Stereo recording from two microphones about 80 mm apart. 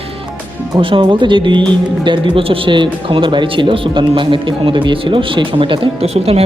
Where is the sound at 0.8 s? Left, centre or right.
Right.